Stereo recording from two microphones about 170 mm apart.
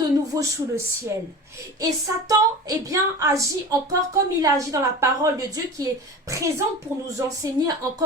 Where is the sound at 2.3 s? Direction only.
20° right (ahead or behind).